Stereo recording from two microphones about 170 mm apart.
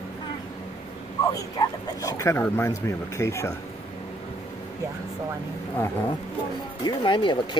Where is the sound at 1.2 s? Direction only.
20° left (ahead or behind).